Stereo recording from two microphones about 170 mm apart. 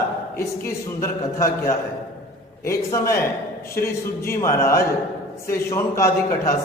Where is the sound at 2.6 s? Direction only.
15° left (ahead or behind).